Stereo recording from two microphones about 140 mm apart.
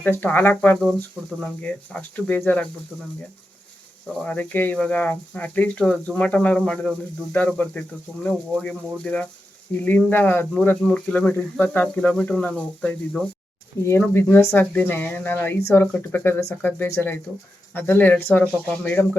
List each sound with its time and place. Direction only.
0.0 s speech: 10° left (ahead or behind)
4.2 s speech: 10° left (ahead or behind)
13.8 s speech: 20° left (ahead or behind)